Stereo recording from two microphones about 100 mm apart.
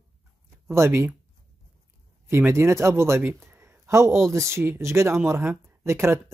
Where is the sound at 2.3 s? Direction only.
25° right (ahead or behind).